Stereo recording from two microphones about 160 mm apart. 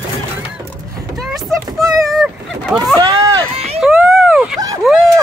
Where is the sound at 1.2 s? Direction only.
Centre (ahead or behind).